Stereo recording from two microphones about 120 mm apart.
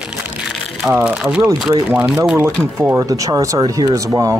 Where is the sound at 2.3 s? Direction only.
20° right (ahead or behind).